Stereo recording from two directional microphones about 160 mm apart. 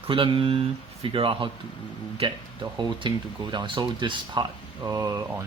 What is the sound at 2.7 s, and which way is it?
Speech, 30° right (ahead or behind).